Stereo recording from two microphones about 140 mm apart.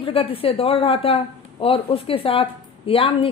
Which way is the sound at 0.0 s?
40° left (ahead or behind).